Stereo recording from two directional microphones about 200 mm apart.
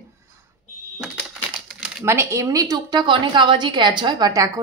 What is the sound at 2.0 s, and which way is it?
A woman's voice, 15° right (ahead or behind).